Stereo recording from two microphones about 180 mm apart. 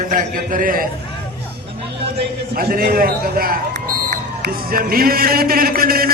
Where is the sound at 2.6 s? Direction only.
55° right (ahead or behind).